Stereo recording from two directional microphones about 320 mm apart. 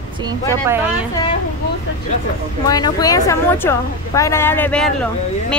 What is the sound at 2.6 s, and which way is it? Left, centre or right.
A woman's voice, centre.